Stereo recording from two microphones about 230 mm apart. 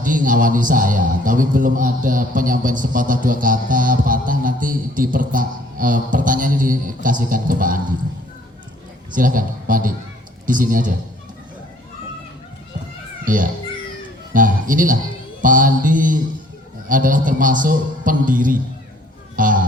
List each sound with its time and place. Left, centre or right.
0.0 s a man's voice: right
9.1 s a man's voice: right
13.2 s a child's voice: right